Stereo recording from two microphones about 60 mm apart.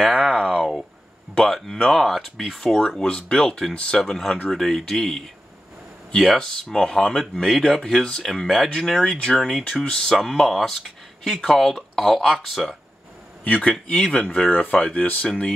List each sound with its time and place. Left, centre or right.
0.0 s a sound: centre
1.3 s speech: centre
3.7 s speech: centre
4.0 s speech: centre
9.7 s speech: centre
13.4 s speech: left